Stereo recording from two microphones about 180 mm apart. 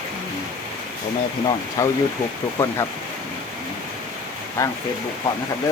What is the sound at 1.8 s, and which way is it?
Speech, 20° left (ahead or behind).